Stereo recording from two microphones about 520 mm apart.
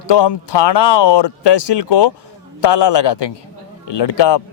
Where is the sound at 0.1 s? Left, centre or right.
Left.